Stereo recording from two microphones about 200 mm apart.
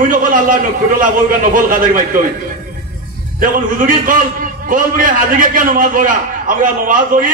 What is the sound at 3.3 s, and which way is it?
A man's voice, 45° right (ahead or behind).